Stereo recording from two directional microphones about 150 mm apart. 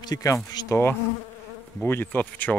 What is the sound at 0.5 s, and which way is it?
Insect, 25° left (ahead or behind).